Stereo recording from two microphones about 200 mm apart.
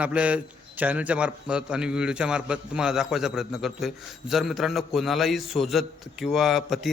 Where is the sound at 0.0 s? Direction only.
5° right (ahead or behind).